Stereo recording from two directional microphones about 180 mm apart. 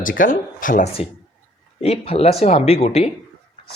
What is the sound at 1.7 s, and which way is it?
Speech, 35° left (ahead or behind).